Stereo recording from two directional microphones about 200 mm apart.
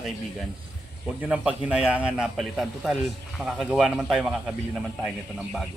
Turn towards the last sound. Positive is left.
turn(degrees=0)  # may be behind; listen again after turning